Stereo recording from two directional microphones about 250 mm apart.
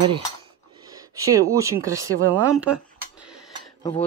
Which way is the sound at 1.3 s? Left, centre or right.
Centre.